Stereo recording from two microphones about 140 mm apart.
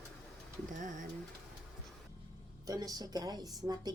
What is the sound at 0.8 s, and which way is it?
Speech, 65° right (ahead or behind).